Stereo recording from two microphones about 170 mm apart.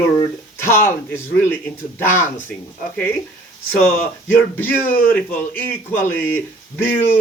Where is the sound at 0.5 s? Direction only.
15° left (ahead or behind).